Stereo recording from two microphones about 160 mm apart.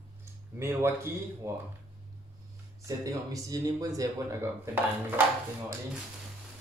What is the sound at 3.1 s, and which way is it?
Speech, 20° right (ahead or behind).